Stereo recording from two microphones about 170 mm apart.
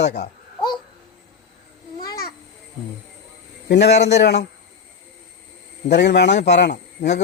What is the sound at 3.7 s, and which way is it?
Speech, 85° left.